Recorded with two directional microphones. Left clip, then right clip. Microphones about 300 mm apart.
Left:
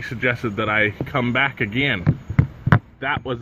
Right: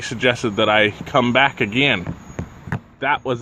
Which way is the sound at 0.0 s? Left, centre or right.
Centre.